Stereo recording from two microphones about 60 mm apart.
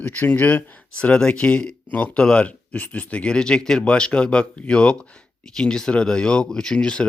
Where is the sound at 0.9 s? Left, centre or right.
Centre.